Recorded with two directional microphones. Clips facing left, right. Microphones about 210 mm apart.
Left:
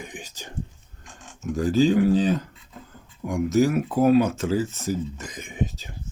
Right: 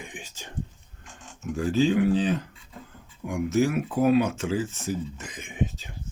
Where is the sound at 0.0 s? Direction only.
40° left (ahead or behind).